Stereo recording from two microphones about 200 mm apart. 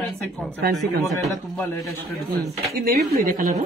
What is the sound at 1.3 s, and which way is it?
Speech, 15° left (ahead or behind).